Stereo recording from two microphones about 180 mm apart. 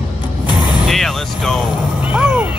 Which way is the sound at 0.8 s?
Centre (ahead or behind).